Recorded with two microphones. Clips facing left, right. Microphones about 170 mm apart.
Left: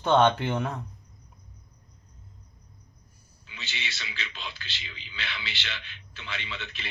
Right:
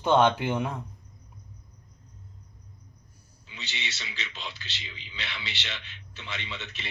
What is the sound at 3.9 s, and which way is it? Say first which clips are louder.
Speech: even; 20° right (ahead or behind).